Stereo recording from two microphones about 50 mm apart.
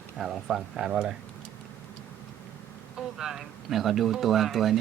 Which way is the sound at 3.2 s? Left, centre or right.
Centre.